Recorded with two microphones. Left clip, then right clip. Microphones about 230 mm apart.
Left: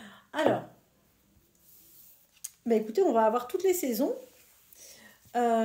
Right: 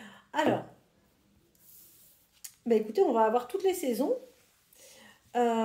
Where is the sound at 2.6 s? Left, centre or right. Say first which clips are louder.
Even; left.